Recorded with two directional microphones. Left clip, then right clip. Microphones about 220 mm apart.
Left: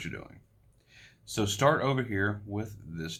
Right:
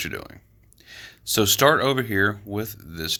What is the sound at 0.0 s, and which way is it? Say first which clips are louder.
Speech: right 10 dB; 45° right (ahead or behind).